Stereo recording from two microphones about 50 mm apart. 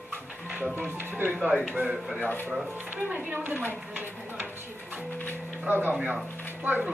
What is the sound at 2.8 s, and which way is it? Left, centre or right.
Speech, right.